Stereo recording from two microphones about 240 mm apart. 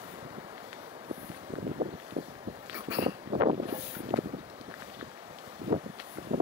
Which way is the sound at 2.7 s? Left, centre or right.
Centre.